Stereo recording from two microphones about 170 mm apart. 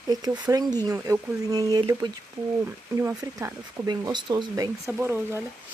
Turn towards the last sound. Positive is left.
turn(degrees=-15)  # may be behind; listen again after turning